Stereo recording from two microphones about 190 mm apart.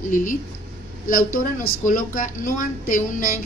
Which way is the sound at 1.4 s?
45° left (ahead or behind).